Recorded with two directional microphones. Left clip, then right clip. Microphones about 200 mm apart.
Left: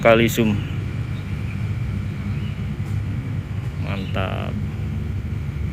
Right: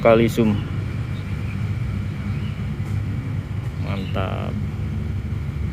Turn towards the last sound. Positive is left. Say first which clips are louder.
# left 1 dB
turn(degrees=-5)  # may be behind; listen again after turning